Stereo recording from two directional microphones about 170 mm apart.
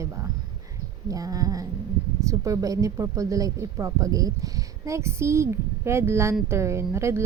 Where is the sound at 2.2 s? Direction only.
20° right (ahead or behind).